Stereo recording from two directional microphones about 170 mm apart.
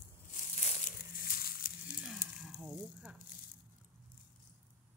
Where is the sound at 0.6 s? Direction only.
45° left (ahead or behind).